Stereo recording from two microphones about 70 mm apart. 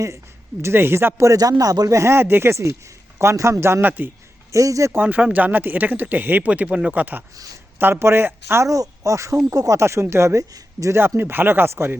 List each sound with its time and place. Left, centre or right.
0.6 s speech: right
1.2 s speech: right
2.0 s speech: right
3.8 s speech: right
4.5 s speech: right
4.9 s speech: right
8.7 s speech: right
11.2 s speech: right